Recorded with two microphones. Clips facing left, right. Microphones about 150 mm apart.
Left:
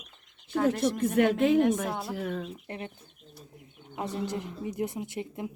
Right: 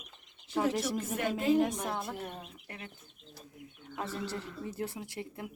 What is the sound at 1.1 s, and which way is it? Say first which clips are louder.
Speech: left 5 dB; 70° left (ahead or behind).